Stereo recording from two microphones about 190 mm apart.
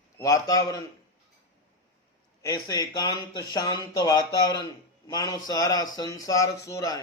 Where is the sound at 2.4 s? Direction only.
20° left (ahead or behind).